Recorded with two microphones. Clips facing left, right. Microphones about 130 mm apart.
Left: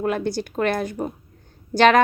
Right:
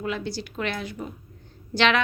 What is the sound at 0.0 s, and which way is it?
A woman's voice, 50° left (ahead or behind).